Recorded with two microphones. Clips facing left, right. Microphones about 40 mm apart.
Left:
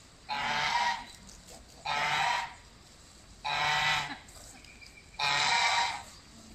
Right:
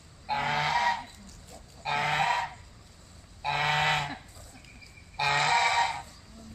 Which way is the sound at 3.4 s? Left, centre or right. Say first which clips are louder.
Right 3 dB; centre.